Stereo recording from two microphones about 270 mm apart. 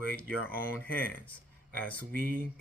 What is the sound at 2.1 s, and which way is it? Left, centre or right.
Speech, right.